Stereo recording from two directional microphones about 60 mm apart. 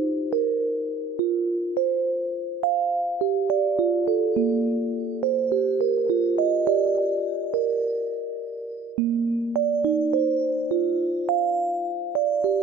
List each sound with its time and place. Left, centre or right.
6.1 s music: right
10.5 s music: right
11.2 s music: centre